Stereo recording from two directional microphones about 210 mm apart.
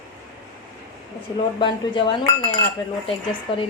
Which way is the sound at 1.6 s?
25° left (ahead or behind).